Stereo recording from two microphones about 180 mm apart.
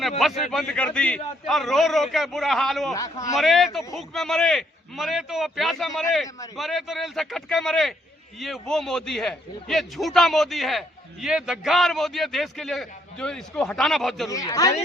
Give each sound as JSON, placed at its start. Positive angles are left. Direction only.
{"t": 0.2, "sound": "a man's voice", "side_deg": 0}
{"t": 2.9, "sound": "speech", "side_deg": 20}
{"t": 3.3, "sound": "a man's voice", "side_deg": 0}
{"t": 14.3, "sound": "speech", "side_deg": 20}